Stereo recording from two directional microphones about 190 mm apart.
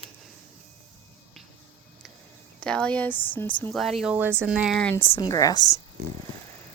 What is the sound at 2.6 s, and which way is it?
Speech, 5° left (ahead or behind).